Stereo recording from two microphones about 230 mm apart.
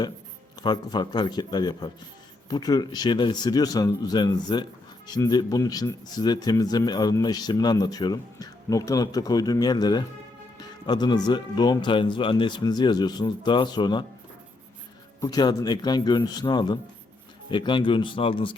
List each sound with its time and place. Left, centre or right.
0.6 s speech: centre
15.2 s speech: centre